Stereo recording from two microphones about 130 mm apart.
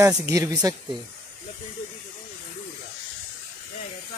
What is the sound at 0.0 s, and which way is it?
Speech, 25° right (ahead or behind).